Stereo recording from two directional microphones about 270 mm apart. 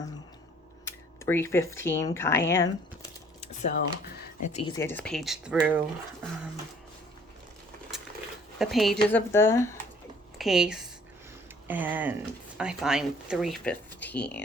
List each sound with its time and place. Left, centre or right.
0.9 s speech: centre
3.4 s speech: left
4.5 s speech: centre
8.5 s speech: centre
10.3 s speech: centre